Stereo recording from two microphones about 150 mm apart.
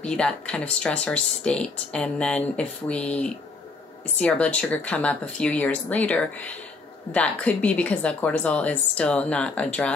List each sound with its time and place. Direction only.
0.0 s speech: 5° left (ahead or behind)